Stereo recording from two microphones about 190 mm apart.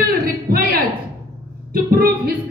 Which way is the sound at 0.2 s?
55° right (ahead or behind).